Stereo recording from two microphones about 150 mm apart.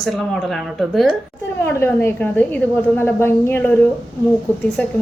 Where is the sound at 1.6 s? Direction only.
15° left (ahead or behind).